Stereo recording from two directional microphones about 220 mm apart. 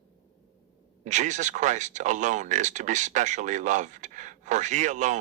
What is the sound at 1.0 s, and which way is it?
Speech, 35° right (ahead or behind).